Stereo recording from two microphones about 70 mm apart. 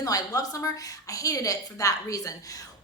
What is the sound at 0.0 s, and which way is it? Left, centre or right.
A woman's voice, left.